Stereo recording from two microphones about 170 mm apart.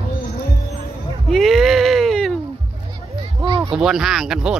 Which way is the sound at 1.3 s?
Centre (ahead or behind).